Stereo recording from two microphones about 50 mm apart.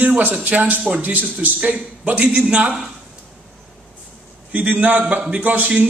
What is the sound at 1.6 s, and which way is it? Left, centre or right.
A man's voice, right.